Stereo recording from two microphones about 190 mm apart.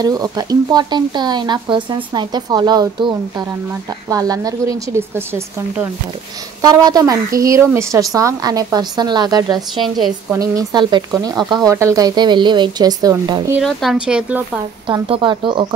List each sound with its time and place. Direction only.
0.0 s a woman's voice: 20° right (ahead or behind)
9.5 s speech: centre (ahead or behind)
10.3 s speech: 20° right (ahead or behind)
13.6 s speech: centre (ahead or behind)
14.9 s speech: 25° right (ahead or behind)